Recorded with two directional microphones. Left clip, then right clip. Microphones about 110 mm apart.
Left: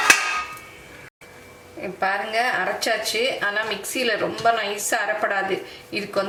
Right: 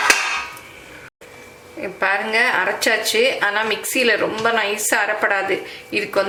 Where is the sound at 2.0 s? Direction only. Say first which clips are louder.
Right 5 dB; 20° right (ahead or behind).